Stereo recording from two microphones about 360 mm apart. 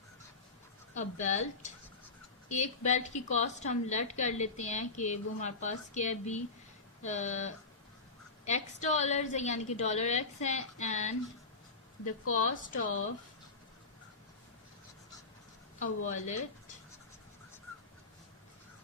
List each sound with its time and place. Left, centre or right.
0.9 s a woman's voice: centre
12.5 s speech: left
15.8 s a woman's voice: centre